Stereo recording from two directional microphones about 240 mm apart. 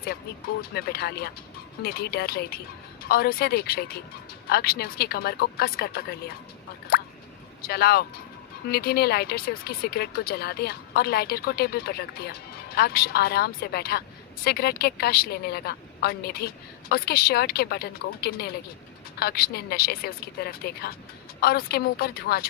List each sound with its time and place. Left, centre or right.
0.7 s speech: left
6.9 s drip: left
7.6 s speech: left